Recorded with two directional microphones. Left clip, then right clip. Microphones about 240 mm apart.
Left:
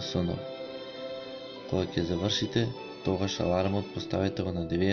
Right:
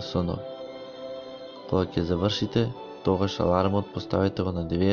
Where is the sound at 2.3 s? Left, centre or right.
Right.